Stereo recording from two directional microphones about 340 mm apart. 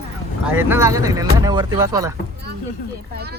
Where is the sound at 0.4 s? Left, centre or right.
Centre.